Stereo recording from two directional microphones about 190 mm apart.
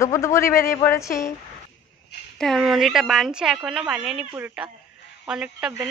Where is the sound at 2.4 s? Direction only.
Centre (ahead or behind).